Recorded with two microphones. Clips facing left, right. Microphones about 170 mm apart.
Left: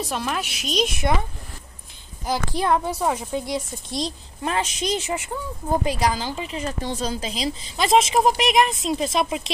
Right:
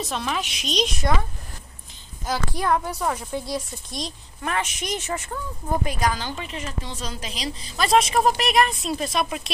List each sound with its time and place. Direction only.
0.0 s a woman's voice: 5° left (ahead or behind)
2.5 s a woman's voice: 25° left (ahead or behind)
5.0 s speech: 15° left (ahead or behind)
5.7 s a woman's voice: 30° left (ahead or behind)